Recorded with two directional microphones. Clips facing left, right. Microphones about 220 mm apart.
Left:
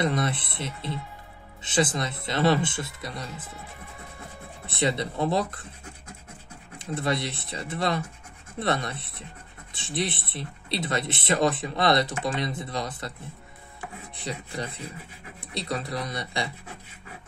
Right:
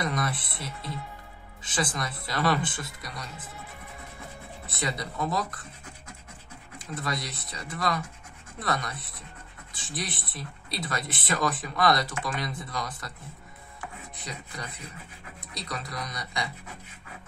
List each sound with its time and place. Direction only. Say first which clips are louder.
0.0 s speech: left 4 dB; 25° left (ahead or behind)
4.6 s speech: left 7 dB; 25° left (ahead or behind)
6.8 s speech: left 6 dB; 25° left (ahead or behind)
14.2 s speech: left 7 dB; 30° left (ahead or behind)